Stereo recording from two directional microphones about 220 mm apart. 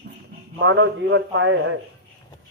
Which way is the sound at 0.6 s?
55° right (ahead or behind).